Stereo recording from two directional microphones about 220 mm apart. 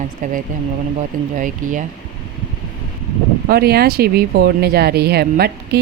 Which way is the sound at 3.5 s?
45° right (ahead or behind).